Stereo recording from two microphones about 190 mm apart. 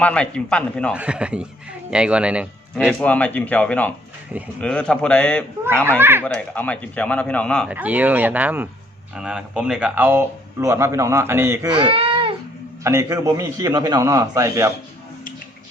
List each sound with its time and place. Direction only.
0.0 s a man's voice: 5° left (ahead or behind)
0.9 s a man's voice: 5° right (ahead or behind)
2.7 s a man's voice: 5° left (ahead or behind)
6.0 s speech: 10° right (ahead or behind)
6.2 s speech: 5° left (ahead or behind)
7.7 s speech: 10° right (ahead or behind)
11.7 s baby cry: 30° right (ahead or behind)
12.8 s speech: 15° right (ahead or behind)